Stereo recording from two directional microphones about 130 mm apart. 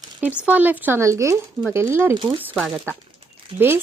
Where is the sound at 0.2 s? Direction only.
10° right (ahead or behind).